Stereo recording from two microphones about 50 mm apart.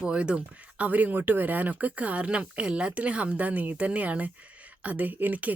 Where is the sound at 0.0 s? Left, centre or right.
Right.